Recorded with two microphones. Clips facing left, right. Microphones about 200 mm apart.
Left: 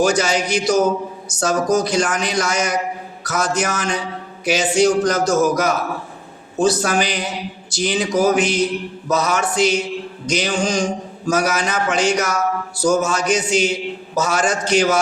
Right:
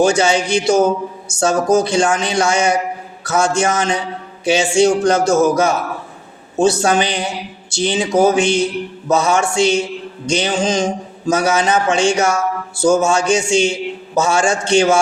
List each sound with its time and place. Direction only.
0.0 s mantra: 25° right (ahead or behind)